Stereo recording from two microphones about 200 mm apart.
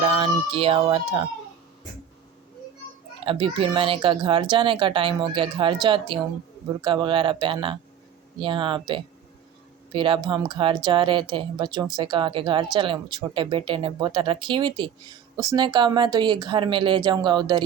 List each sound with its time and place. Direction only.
0.0 s speech: 30° right (ahead or behind)
3.2 s speech: 25° right (ahead or behind)